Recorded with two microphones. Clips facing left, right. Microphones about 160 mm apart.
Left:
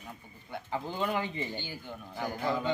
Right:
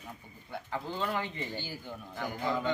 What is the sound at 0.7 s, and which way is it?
Speech, 15° left (ahead or behind).